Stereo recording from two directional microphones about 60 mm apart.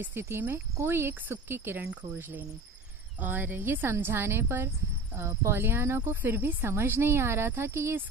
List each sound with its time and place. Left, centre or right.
0.2 s speech: right